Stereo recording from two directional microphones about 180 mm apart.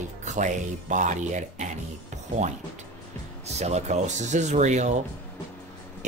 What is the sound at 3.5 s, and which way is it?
Speech, 40° right (ahead or behind).